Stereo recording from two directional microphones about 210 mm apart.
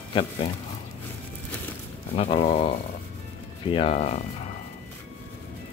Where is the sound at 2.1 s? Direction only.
30° left (ahead or behind).